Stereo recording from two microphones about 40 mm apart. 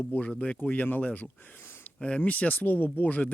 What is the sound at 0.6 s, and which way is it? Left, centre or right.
Speech, left.